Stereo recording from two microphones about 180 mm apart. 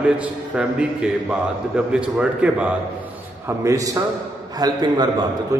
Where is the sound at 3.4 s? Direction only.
15° right (ahead or behind).